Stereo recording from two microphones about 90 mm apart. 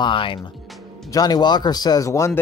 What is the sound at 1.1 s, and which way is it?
Speech, 50° left (ahead or behind).